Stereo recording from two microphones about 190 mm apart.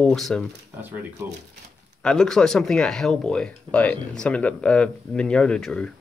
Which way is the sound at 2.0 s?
5° left (ahead or behind).